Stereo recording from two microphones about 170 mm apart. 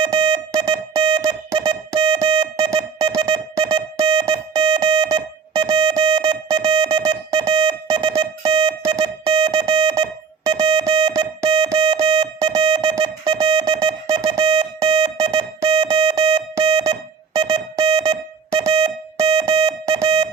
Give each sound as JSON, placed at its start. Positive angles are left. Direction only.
{"t": 0.0, "sound": "music", "side_deg": -25}